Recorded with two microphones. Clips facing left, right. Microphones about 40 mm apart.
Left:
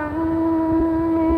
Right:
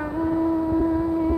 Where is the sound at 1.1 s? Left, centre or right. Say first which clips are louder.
Left 4 dB; left.